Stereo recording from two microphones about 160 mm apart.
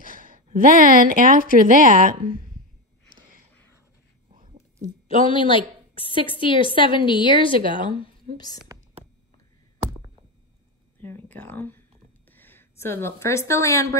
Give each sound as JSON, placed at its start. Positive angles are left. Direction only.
{"t": 0.0, "sound": "a woman's voice", "side_deg": -60}
{"t": 4.3, "sound": "whispering", "side_deg": -40}
{"t": 5.0, "sound": "a woman's voice", "side_deg": 35}
{"t": 11.0, "sound": "a woman's voice", "side_deg": 10}